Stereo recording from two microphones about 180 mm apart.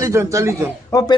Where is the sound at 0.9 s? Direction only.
20° left (ahead or behind).